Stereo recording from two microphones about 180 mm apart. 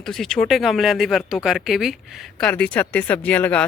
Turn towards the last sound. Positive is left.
turn(degrees=5)  # may be behind; listen again after turning